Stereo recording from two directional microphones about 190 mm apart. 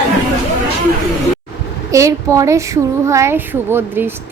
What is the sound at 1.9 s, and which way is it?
Speech, 15° right (ahead or behind).